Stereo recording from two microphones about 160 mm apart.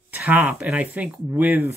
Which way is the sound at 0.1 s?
10° right (ahead or behind).